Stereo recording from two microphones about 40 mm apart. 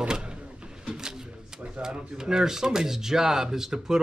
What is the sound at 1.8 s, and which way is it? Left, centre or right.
Speech, centre.